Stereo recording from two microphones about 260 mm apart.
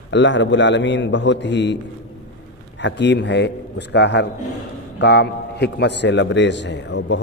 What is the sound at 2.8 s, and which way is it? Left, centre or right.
A man's voice, left.